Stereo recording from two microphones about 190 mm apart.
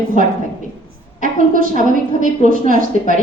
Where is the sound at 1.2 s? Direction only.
45° right (ahead or behind).